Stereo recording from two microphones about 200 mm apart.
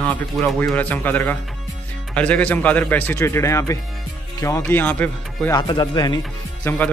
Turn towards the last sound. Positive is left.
turn(degrees=10)  # may be behind; listen again after turning